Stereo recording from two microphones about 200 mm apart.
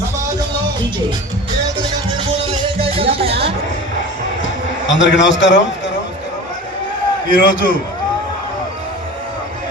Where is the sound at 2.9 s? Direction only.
30° right (ahead or behind).